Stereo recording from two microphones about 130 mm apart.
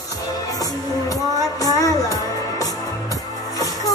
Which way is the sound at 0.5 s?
30° left (ahead or behind).